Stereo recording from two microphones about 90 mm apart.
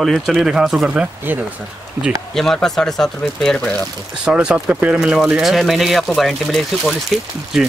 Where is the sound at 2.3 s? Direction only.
5° left (ahead or behind).